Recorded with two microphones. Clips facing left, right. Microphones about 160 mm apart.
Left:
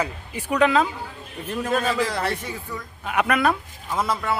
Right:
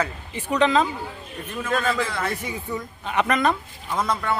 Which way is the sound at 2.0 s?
35° left (ahead or behind).